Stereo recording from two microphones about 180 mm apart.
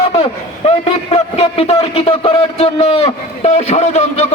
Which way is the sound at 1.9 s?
35° left (ahead or behind).